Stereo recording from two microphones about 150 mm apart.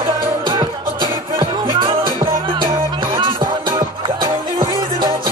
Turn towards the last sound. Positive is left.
turn(degrees=-30)  # may be behind; listen again after turning